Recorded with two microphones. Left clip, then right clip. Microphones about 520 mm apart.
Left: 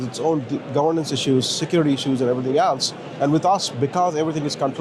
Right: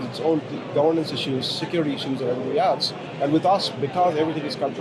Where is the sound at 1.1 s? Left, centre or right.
Left.